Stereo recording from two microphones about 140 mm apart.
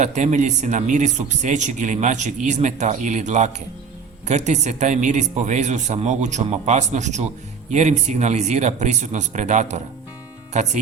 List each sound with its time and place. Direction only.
0.0 s speech: 55° right (ahead or behind)